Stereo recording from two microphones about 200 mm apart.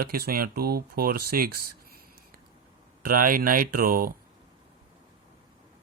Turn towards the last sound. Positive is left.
turn(degrees=-45)  # may be behind; listen again after turning